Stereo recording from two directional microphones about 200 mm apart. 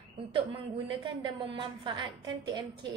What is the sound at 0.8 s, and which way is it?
A woman's voice, 25° right (ahead or behind).